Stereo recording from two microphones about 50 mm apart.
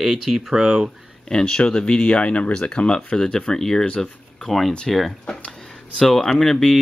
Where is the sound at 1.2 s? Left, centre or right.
Centre.